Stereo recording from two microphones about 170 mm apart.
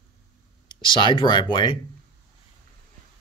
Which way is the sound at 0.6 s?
25° left (ahead or behind).